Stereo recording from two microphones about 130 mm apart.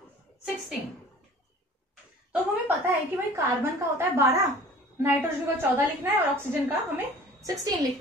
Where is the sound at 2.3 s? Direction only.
15° right (ahead or behind).